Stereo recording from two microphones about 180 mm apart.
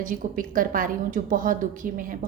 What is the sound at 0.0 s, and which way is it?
A woman's voice, 50° right (ahead or behind).